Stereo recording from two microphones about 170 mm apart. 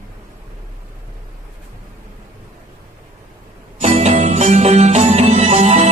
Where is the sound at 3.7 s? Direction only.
40° right (ahead or behind).